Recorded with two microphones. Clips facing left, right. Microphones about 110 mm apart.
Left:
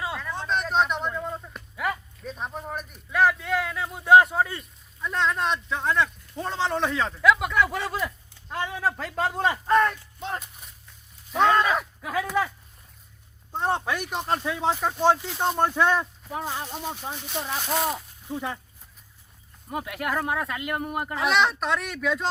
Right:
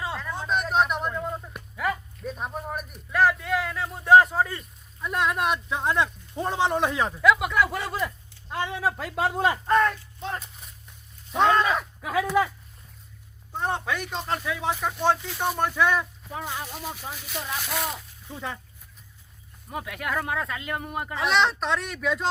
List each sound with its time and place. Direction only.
0.0 s a sound: centre (ahead or behind)
1.7 s speech: centre (ahead or behind)
5.0 s speech: 10° right (ahead or behind)
7.2 s speech: centre (ahead or behind)
11.3 s a sound: centre (ahead or behind)
12.0 s speech: 5° right (ahead or behind)
13.5 s speech: 20° left (ahead or behind)
17.7 s speech: 10° left (ahead or behind)
19.7 s speech: 20° left (ahead or behind)
21.1 s speech: centre (ahead or behind)